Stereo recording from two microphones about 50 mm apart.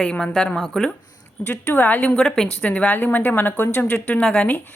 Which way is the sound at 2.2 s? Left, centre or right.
Centre.